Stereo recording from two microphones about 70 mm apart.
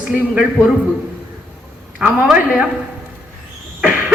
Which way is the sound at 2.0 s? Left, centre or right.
Centre.